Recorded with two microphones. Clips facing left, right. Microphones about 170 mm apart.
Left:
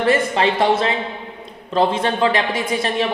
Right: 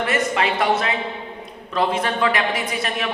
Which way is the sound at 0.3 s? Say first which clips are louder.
Left 3 dB; 30° left (ahead or behind).